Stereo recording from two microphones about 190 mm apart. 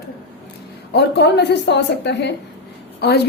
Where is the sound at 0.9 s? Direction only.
65° left (ahead or behind).